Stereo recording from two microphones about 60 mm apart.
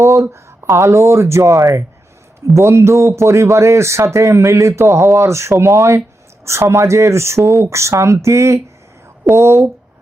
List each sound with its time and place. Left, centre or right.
0.0 s speech: right